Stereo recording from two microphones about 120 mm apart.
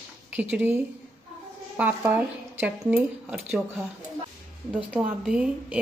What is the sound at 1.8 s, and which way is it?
A woman's voice, 15° right (ahead or behind).